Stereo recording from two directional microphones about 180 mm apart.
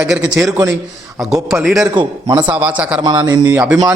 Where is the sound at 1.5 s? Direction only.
5° right (ahead or behind).